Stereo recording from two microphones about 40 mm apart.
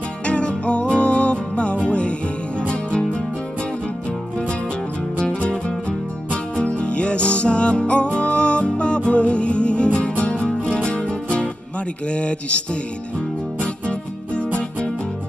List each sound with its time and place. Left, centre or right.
0.3 s music: left
5.2 s music: left
12.1 s speech: left
13.6 s music: left